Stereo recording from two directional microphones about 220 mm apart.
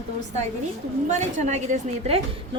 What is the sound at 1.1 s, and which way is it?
A woman's voice, 35° right (ahead or behind).